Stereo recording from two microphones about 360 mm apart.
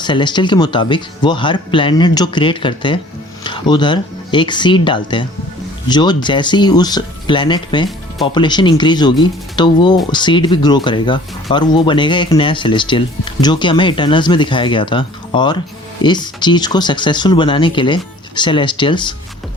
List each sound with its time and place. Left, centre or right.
0.0 s speech: centre